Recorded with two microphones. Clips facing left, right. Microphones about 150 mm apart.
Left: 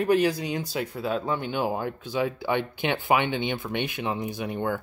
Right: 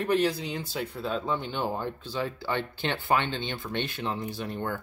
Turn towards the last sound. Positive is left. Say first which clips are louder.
# left 4 dB
turn(degrees=15)  # may be behind; listen again after turning